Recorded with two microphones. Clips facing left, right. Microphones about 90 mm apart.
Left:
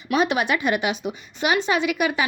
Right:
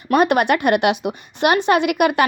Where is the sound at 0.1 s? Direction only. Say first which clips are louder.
Right 6 dB; 55° right (ahead or behind).